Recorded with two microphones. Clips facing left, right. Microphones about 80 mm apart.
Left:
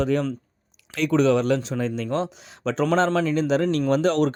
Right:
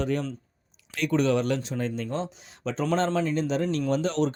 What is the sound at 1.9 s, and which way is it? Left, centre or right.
Speech, left.